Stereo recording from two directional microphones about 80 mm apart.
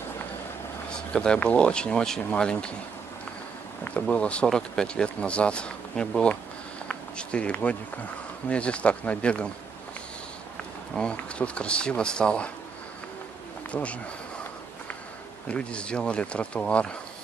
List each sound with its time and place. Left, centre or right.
0.8 s a man's voice: centre
4.1 s a man's voice: centre
6.9 s a sound: centre
8.5 s a man's voice: centre
11.0 s a man's voice: centre
13.7 s speech: centre
15.4 s a man's voice: centre